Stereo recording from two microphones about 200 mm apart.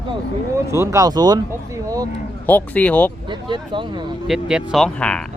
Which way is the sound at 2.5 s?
10° left (ahead or behind).